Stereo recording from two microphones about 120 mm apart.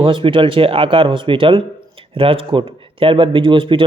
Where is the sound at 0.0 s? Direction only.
45° right (ahead or behind).